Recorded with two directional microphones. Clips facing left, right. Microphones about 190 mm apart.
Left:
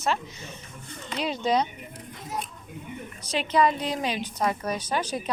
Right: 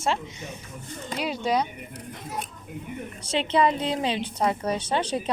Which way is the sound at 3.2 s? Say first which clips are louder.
Right 1 dB; 25° right (ahead or behind).